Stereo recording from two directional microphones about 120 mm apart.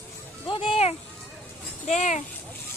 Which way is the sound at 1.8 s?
80° left.